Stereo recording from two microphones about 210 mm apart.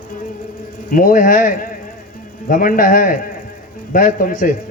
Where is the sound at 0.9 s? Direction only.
40° left (ahead or behind).